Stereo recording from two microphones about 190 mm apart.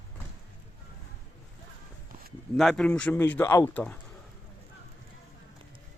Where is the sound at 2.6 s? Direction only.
5° left (ahead or behind).